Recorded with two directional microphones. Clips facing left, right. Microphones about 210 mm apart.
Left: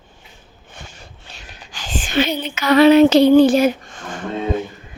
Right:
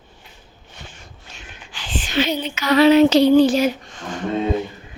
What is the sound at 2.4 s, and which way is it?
Female singing, 55° left (ahead or behind).